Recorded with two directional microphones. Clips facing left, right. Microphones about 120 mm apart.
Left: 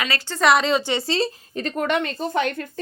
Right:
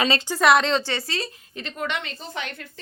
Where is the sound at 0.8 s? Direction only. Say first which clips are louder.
Left 7 dB; 20° left (ahead or behind).